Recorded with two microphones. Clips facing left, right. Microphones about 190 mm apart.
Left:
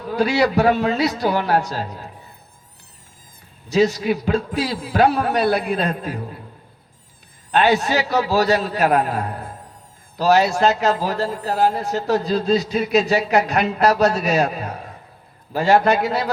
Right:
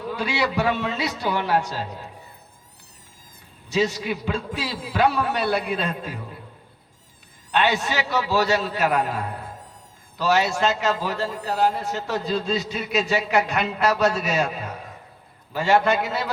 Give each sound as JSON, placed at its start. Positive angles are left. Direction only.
{"t": 0.1, "sound": "a man's voice", "side_deg": 40}
{"t": 3.7, "sound": "a man's voice", "side_deg": 40}
{"t": 7.5, "sound": "a man's voice", "side_deg": 40}